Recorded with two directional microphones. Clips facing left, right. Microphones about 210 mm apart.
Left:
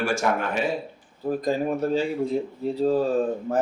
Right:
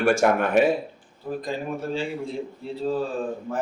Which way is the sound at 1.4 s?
40° left (ahead or behind).